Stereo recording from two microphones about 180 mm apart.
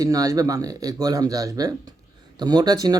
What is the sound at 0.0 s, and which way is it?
Music, 20° right (ahead or behind).